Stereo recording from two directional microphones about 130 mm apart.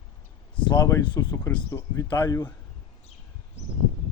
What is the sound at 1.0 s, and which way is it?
Speech, 30° left (ahead or behind).